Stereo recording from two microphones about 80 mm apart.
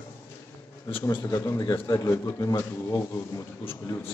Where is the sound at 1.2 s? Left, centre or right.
Left.